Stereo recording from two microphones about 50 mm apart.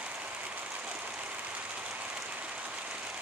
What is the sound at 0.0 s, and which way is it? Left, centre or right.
Train, right.